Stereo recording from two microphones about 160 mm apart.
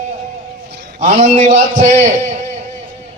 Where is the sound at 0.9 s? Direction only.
50° right (ahead or behind).